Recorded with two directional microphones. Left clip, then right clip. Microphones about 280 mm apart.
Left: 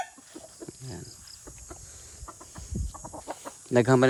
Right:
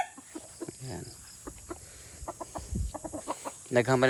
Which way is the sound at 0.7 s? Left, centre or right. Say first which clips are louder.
Right 1 dB; centre.